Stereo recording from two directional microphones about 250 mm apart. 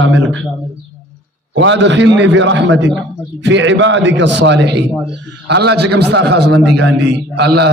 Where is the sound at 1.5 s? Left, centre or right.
Right.